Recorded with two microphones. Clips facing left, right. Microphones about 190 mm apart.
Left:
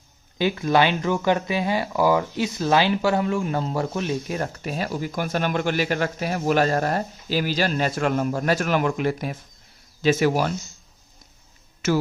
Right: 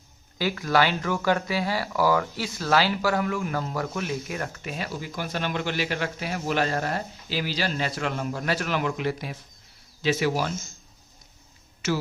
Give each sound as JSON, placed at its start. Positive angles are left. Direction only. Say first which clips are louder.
{"t": 0.3, "sound": "speech", "louder": "left 3 dB", "side_deg": 20}
{"t": 11.8, "sound": "speech", "louder": "left 5 dB", "side_deg": 50}